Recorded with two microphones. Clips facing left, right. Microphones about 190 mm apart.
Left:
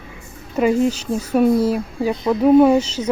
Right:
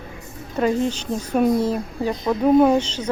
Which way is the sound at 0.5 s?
10° left (ahead or behind).